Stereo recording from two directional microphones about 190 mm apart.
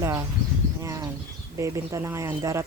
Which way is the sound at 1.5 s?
15° right (ahead or behind).